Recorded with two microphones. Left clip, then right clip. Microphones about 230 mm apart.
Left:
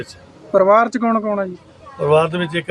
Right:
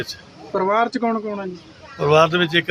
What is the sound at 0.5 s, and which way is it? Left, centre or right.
Speech, left.